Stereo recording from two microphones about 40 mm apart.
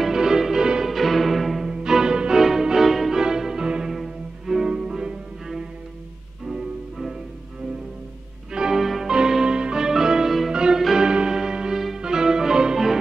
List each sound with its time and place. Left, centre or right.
0.0 s music: centre
1.7 s music: centre
4.6 s cello: centre
6.4 s music: centre
8.5 s music: centre
8.8 s music: centre
9.1 s music: centre